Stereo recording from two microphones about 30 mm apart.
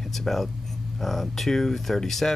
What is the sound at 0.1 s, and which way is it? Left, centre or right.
Speech, centre.